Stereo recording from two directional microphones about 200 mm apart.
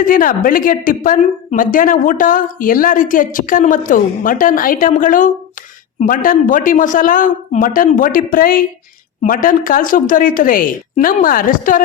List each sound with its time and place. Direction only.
0.0 s a woman's voice: 45° left (ahead or behind)